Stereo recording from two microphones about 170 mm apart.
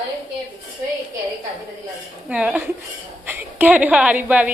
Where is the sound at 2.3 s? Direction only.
5° right (ahead or behind).